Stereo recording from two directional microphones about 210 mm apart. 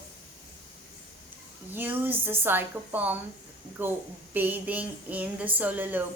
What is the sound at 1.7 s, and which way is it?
A woman's voice, 10° right (ahead or behind).